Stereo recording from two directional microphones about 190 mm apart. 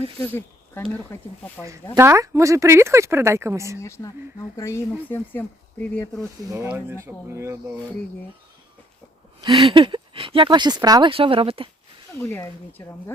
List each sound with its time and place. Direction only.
0.2 s speech: 10° left (ahead or behind)
2.0 s speech: 15° right (ahead or behind)
3.8 s speech: 15° left (ahead or behind)
6.5 s speech: 15° right (ahead or behind)
9.4 s speech: 25° right (ahead or behind)
12.2 s speech: 10° left (ahead or behind)